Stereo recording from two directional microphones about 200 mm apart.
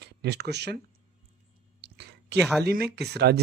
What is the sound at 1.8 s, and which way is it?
Whispering, 55° right (ahead or behind).